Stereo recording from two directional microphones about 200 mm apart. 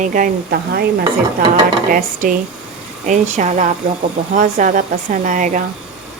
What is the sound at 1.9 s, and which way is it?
Speech, 40° right (ahead or behind).